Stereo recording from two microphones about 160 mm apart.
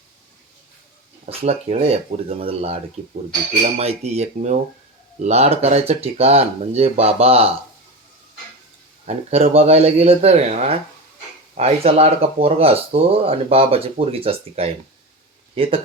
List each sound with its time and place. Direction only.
1.2 s speech: 40° right (ahead or behind)
9.5 s speech: 40° right (ahead or behind)